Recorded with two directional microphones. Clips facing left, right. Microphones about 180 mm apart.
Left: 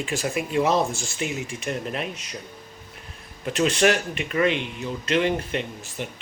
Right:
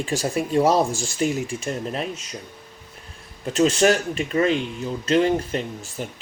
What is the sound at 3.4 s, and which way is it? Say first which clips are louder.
Speech: right 3 dB; 30° right (ahead or behind).